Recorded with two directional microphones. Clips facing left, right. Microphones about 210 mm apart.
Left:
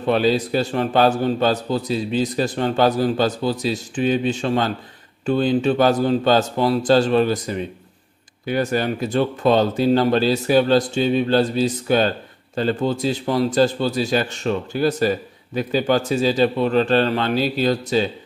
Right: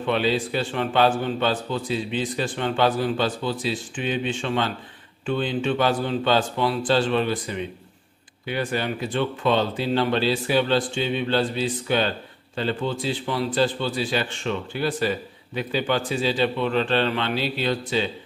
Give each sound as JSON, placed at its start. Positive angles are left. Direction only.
{"t": 0.0, "sound": "a man's voice", "side_deg": 40}